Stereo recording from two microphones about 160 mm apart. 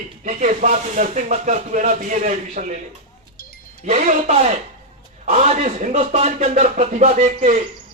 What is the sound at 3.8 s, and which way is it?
Speech, 45° right (ahead or behind).